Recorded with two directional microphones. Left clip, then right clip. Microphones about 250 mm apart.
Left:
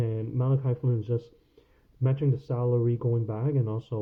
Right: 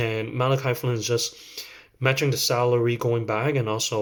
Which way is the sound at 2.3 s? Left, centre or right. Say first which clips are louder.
Right 8 dB; right.